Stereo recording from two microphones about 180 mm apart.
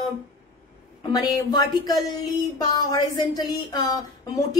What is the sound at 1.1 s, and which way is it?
A woman's voice, 20° left (ahead or behind).